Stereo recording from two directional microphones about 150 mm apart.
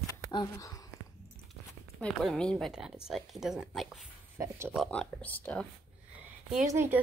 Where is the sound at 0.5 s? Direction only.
20° left (ahead or behind).